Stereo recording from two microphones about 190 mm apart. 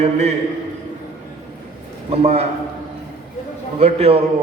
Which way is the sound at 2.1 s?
35° right (ahead or behind).